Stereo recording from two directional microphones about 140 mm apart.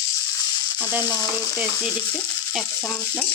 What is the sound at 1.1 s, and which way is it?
Frying, 20° right (ahead or behind).